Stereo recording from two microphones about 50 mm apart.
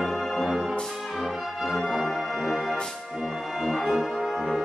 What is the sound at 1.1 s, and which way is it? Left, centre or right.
Brass instrument, centre.